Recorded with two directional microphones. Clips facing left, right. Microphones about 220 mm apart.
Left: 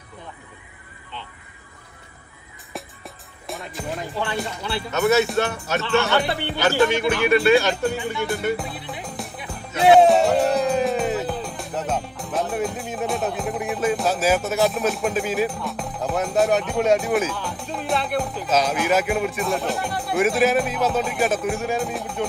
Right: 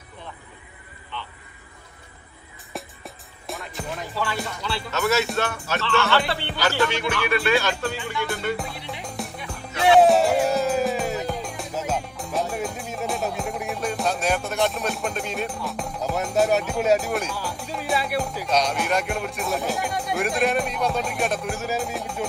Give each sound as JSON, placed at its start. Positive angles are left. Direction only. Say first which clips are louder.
{"t": 2.7, "sound": "music", "louder": "even", "side_deg": 0}
{"t": 4.1, "sound": "music", "louder": "even", "side_deg": 20}
{"t": 4.6, "sound": "speech", "louder": "left 4 dB", "side_deg": 20}
{"t": 8.3, "sound": "music", "louder": "left 3 dB", "side_deg": 0}